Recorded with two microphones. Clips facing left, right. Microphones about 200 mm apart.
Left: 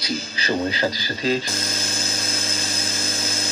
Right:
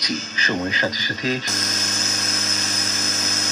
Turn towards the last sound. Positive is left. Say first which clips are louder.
# even
turn(degrees=30)  # may be behind; listen again after turning